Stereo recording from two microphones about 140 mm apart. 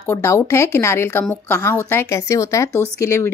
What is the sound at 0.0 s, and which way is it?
Speech, 20° left (ahead or behind).